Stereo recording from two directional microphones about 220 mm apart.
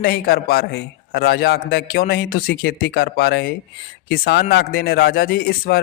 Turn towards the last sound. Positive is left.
turn(degrees=45)  # may be behind; listen again after turning